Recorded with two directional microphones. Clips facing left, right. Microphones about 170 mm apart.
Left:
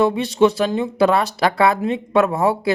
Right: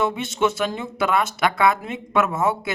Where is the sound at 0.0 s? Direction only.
30° left (ahead or behind).